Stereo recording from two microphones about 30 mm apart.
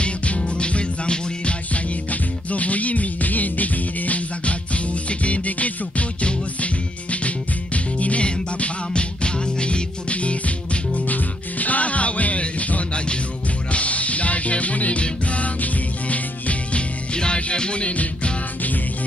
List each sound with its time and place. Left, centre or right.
0.0 s music: left
1.7 s music: left
4.5 s music: left
11.1 s music: left
17.1 s music: left